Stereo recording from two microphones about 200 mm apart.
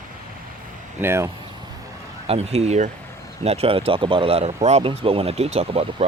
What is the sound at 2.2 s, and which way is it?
Speech, 30° right (ahead or behind).